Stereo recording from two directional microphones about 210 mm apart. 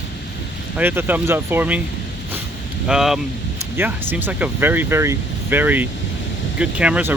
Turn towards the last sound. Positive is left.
turn(degrees=-5)  # may be behind; listen again after turning